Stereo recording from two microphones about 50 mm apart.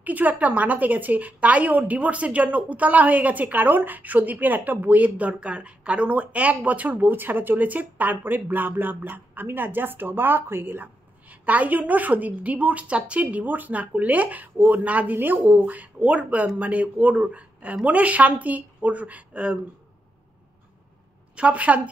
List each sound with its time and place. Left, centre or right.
0.0 s a woman's voice: right
11.2 s a woman's voice: right
21.4 s speech: right